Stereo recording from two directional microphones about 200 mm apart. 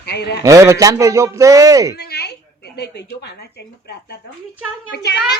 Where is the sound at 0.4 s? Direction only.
15° right (ahead or behind).